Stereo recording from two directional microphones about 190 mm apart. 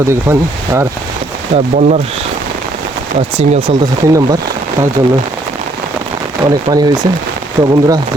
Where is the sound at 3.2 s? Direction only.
30° right (ahead or behind).